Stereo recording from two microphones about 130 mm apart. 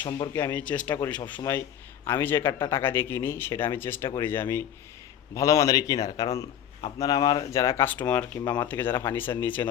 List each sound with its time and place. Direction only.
0.3 s a man's voice: 15° left (ahead or behind)
8.4 s speech: 30° left (ahead or behind)
8.6 s speech: 15° left (ahead or behind)